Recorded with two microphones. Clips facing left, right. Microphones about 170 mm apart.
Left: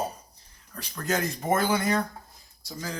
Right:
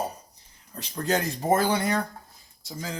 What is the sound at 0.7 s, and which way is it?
Speech, 25° right (ahead or behind).